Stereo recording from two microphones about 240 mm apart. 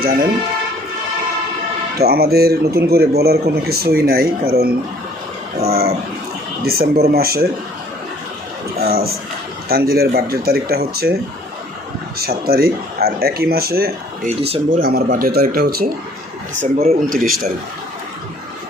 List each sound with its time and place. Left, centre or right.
0.0 s speech: right
2.0 s speech: right
8.8 s speech: right
12.2 s speech: right
14.4 s speech: right
14.8 s speech: right
16.6 s speech: right